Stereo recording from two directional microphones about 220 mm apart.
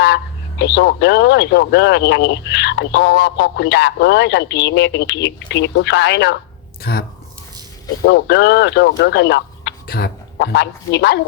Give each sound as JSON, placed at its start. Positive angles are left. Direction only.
{"t": 0.6, "sound": "speech", "side_deg": 50}
{"t": 8.0, "sound": "speech", "side_deg": 50}